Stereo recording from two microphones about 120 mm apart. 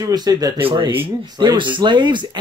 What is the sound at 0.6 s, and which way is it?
Speech, 45° right (ahead or behind).